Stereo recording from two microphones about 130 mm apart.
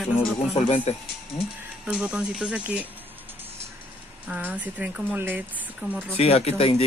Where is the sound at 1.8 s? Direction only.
5° right (ahead or behind).